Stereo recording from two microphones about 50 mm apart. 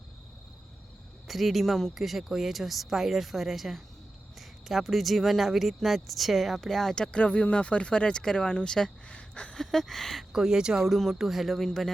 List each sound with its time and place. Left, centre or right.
1.3 s speech: centre
6.9 s speech: centre
9.0 s a sound: left
9.6 s speech: centre
10.3 s speech: centre